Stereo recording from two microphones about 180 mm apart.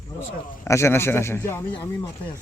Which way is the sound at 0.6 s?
15° left (ahead or behind).